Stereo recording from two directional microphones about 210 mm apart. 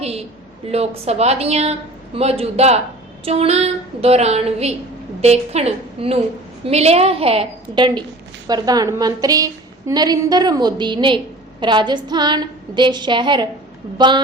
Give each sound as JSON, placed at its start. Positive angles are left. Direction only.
{"t": 0.0, "sound": "a woman's voice", "side_deg": -30}